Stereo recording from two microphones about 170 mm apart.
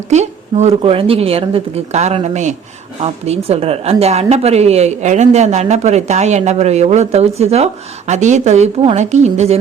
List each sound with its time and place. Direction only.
0.1 s a woman's voice: 40° right (ahead or behind)